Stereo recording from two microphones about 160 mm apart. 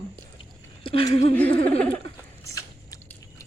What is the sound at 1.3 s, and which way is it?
Speech, 10° left (ahead or behind).